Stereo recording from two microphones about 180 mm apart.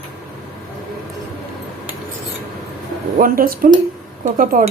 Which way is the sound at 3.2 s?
50° right (ahead or behind).